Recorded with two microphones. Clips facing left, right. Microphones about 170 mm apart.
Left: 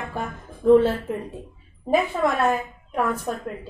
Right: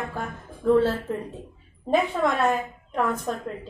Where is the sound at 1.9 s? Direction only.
10° left (ahead or behind).